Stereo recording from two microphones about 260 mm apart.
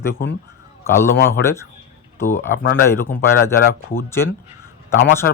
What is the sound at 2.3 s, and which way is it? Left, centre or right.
Speech, left.